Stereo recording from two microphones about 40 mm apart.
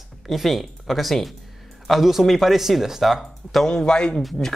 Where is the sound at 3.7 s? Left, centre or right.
Centre.